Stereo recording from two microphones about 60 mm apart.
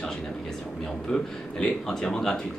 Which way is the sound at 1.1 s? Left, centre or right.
Centre.